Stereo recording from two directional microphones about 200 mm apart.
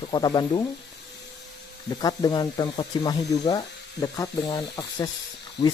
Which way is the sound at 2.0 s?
20° left (ahead or behind).